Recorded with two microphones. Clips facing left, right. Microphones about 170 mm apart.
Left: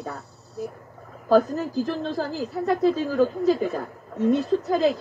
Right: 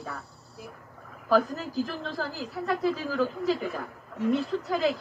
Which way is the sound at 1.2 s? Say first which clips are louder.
Left 5 dB; 20° left (ahead or behind).